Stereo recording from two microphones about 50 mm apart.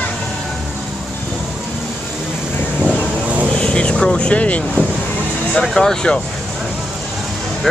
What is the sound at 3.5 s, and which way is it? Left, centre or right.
Vehicle, left.